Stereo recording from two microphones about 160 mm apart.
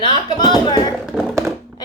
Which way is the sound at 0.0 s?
30° left (ahead or behind).